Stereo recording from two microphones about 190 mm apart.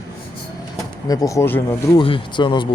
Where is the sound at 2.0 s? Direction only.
25° left (ahead or behind).